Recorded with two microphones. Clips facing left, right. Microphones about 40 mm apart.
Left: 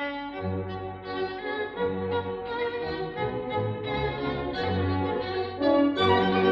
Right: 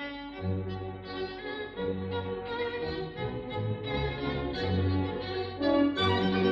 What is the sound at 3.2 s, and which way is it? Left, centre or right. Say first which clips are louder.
Music: left 6 dB; centre.